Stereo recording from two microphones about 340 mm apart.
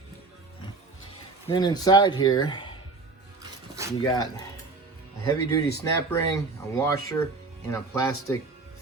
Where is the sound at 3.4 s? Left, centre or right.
Centre.